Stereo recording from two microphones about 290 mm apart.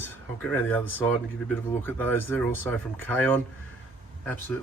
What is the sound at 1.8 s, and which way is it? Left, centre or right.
Speech, centre.